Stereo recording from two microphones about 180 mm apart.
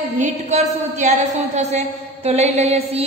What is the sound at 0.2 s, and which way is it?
A woman's voice, 40° right (ahead or behind).